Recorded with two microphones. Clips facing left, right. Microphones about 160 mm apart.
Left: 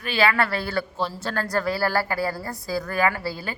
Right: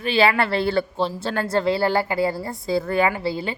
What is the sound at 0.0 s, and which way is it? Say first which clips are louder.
Speech: right 3 dB; 25° right (ahead or behind).